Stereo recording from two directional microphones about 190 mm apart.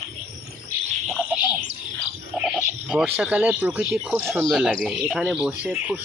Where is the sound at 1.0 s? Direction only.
Centre (ahead or behind).